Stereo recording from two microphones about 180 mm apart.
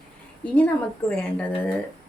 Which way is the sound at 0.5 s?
10° left (ahead or behind).